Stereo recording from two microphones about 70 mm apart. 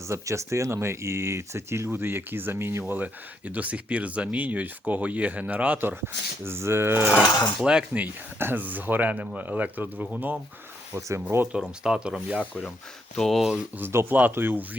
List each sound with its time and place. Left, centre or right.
0.1 s speech: right
2.9 s speech: right
6.4 s speech: right
7.6 s speech: centre
8.4 s speech: right
10.9 s speech: right
11.8 s speech: centre
13.1 s speech: centre
13.4 s speech: centre
13.7 s speech: right